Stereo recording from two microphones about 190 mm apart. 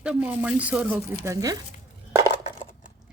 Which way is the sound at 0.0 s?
5° right (ahead or behind).